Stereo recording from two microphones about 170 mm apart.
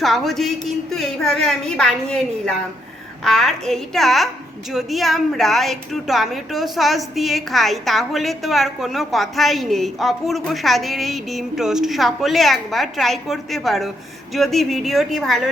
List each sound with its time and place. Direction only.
0.0 s a woman's voice: centre (ahead or behind)